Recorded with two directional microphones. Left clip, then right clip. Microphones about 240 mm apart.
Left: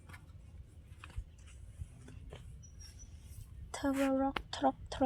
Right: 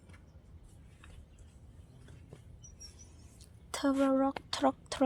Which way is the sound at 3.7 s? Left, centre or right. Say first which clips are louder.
Right 4 dB; right.